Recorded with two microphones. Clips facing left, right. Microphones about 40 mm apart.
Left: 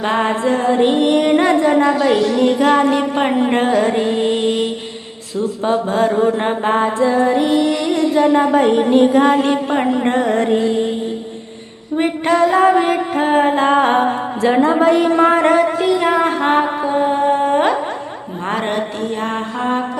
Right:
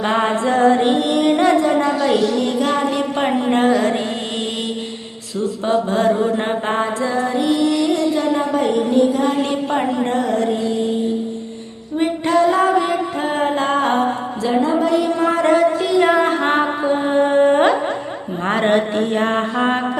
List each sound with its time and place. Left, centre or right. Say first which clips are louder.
0.0 s music: left 1 dB; centre
8.4 s a sound: left 5 dB; left
9.4 s music: left 3 dB; centre
10.1 s music: left 3 dB; left
11.9 s music: left 1 dB; left
14.4 s a woman's voice: left 4 dB; left
16.0 s music: right 1 dB; centre